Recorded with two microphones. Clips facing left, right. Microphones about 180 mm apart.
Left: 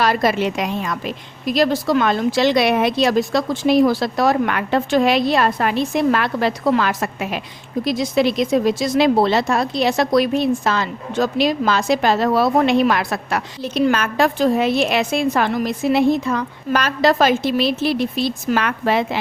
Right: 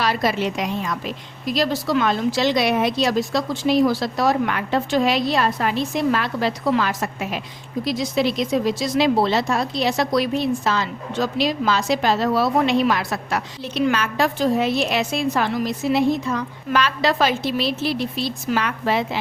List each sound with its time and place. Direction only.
0.0 s speech: 50° left (ahead or behind)
7.9 s speech: 55° left (ahead or behind)
13.6 s speech: 40° left (ahead or behind); by 16.4 s 60° left (ahead or behind)
16.7 s speech: 45° left (ahead or behind)